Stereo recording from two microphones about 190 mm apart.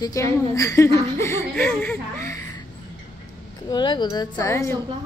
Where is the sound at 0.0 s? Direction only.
15° left (ahead or behind).